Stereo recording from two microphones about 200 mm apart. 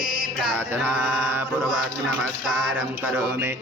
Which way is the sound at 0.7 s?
10° right (ahead or behind).